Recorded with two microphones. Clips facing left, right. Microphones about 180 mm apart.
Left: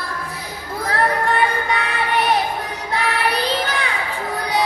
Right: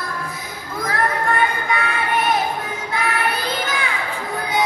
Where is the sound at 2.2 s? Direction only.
35° left (ahead or behind).